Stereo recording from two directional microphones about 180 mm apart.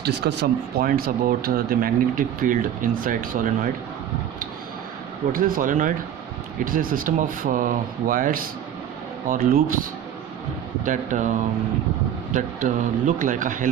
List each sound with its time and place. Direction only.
0.0 s speech: 70° right (ahead or behind); by 3.7 s 45° right (ahead or behind)
5.3 s speech: 50° right (ahead or behind)
10.8 s speech: 45° right (ahead or behind)
12.3 s speech: 45° right (ahead or behind)